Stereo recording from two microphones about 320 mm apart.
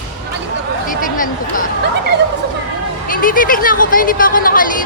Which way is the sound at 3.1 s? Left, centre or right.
Left.